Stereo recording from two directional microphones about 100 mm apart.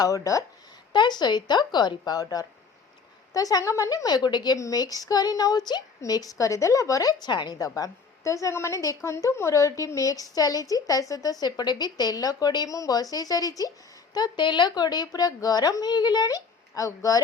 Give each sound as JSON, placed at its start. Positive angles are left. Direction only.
{"t": 0.0, "sound": "a woman's voice", "side_deg": 35}
{"t": 0.9, "sound": "a woman's voice", "side_deg": 45}
{"t": 7.8, "sound": "a woman's voice", "side_deg": 30}